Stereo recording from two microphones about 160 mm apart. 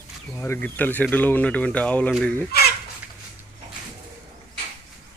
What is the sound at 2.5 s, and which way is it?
Fowl, 75° left (ahead or behind).